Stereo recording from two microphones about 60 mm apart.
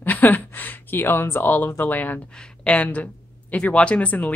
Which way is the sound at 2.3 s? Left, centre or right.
Centre.